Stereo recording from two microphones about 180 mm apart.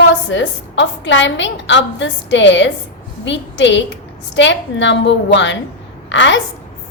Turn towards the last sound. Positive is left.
turn(degrees=90)